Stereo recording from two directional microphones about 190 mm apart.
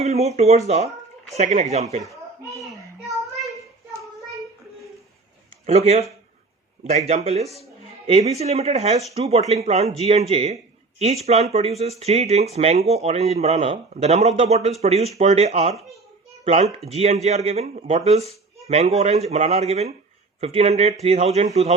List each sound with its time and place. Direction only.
0.0 s speech: 35° right (ahead or behind)
5.6 s speech: 35° right (ahead or behind)